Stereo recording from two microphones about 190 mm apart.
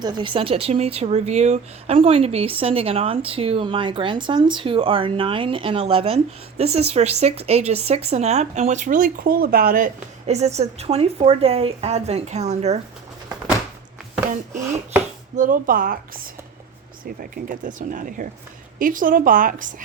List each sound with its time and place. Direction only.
0.0 s speech: 25° right (ahead or behind)
15.4 s speech: 45° right (ahead or behind)